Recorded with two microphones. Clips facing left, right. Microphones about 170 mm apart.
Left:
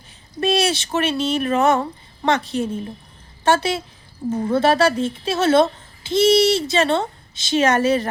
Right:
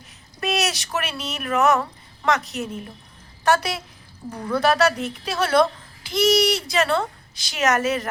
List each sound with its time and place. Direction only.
0.3 s a woman's voice: 30° left (ahead or behind)